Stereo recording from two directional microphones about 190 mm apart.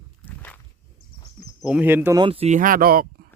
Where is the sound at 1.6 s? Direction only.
5° right (ahead or behind).